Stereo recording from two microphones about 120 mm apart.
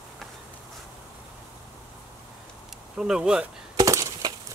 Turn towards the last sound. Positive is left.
turn(degrees=-25)  # may be behind; listen again after turning